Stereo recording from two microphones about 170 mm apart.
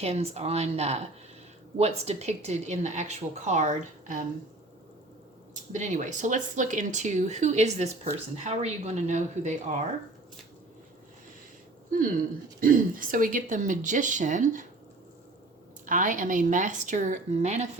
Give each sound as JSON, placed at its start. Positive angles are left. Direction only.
{"t": 0.0, "sound": "speech", "side_deg": -40}
{"t": 5.7, "sound": "speech", "side_deg": -45}
{"t": 12.5, "sound": "speech", "side_deg": -55}
{"t": 15.9, "sound": "speech", "side_deg": -50}